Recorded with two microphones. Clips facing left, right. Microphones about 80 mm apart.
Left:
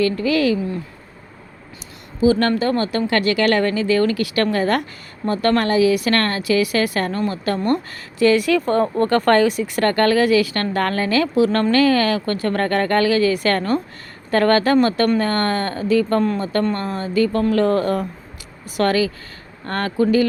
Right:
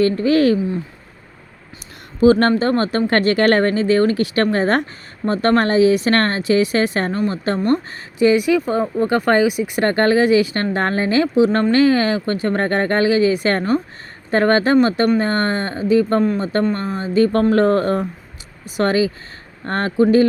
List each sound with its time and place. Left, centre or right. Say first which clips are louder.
0.0 s speech: right 3 dB; right
2.2 s speech: right 3 dB; right
17.5 s speech: right 2 dB; right
18.8 s speech: right 1 dB; right